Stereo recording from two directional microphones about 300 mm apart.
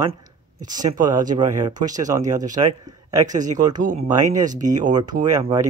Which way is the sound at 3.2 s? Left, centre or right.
Right.